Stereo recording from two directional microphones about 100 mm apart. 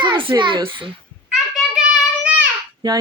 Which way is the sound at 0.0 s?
55° right (ahead or behind).